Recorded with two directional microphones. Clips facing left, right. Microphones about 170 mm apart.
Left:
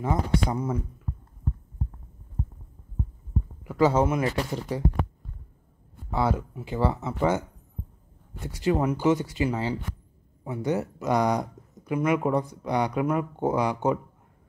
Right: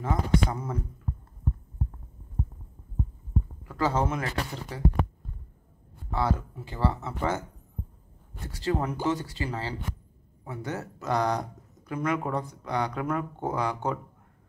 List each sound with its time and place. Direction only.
0.0 s speech: 15° left (ahead or behind)
3.6 s speech: 15° left (ahead or behind)
6.1 s speech: 15° left (ahead or behind)
8.5 s speech: 15° left (ahead or behind)